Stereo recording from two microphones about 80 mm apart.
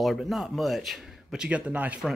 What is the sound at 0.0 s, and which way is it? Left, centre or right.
Speech, centre.